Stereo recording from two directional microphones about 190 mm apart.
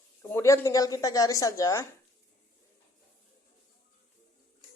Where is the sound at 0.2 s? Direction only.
15° left (ahead or behind).